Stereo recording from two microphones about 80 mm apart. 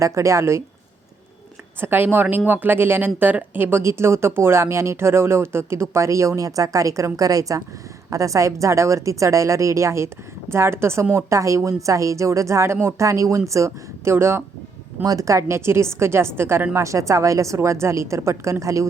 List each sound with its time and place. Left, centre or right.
0.0 s speech: right
1.8 s speech: right
15.0 s speech: right
16.7 s speech: right